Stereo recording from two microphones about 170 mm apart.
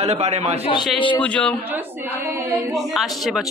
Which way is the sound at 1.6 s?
10° right (ahead or behind).